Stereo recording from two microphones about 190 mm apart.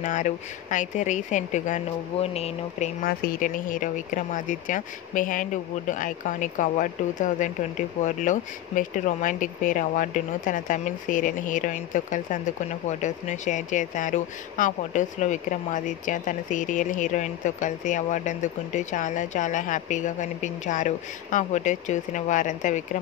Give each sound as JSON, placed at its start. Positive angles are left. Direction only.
{"t": 0.0, "sound": "speech", "side_deg": 40}
{"t": 3.0, "sound": "speech", "side_deg": 50}